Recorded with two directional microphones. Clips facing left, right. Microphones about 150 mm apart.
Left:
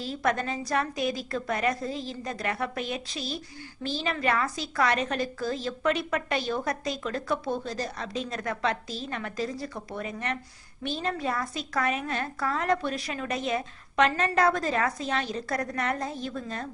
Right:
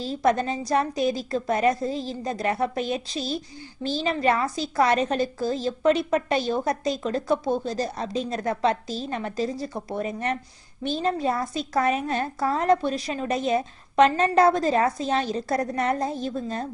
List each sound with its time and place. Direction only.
0.0 s a woman's voice: 35° right (ahead or behind)